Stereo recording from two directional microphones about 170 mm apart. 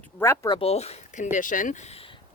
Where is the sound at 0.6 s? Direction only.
35° left (ahead or behind).